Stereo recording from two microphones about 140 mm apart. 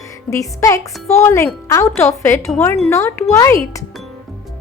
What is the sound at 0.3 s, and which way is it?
A woman's voice, 20° left (ahead or behind).